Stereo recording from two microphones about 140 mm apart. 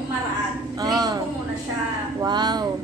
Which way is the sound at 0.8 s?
25° right (ahead or behind).